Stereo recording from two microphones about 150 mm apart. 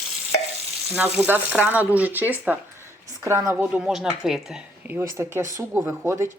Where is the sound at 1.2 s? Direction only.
10° right (ahead or behind).